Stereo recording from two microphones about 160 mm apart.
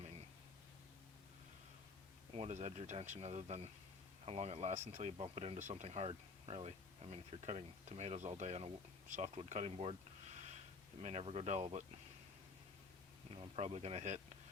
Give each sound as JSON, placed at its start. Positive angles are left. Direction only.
{"t": 2.3, "sound": "speech", "side_deg": -40}
{"t": 11.0, "sound": "speech", "side_deg": -40}
{"t": 13.3, "sound": "speech", "side_deg": -35}